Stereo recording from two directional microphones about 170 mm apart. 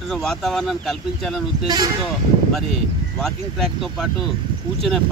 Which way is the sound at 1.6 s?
25° right (ahead or behind).